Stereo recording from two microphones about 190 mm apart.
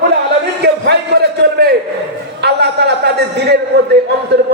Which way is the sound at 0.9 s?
60° right (ahead or behind).